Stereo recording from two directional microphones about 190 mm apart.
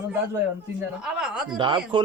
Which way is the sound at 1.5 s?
25° right (ahead or behind).